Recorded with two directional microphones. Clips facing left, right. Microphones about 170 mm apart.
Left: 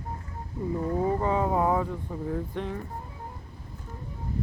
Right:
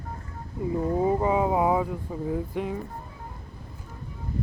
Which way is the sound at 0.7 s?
20° right (ahead or behind).